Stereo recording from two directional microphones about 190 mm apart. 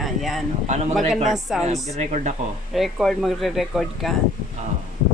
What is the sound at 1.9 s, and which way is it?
Speech, 35° right (ahead or behind).